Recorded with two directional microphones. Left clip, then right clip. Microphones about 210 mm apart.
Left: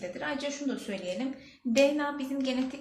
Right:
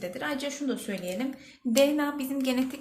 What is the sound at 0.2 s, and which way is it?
Speech, 40° right (ahead or behind).